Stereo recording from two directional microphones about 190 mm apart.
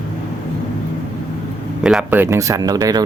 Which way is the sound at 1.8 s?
5° right (ahead or behind).